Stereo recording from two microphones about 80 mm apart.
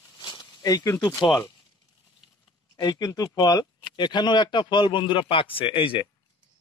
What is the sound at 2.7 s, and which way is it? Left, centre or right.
Speech, left.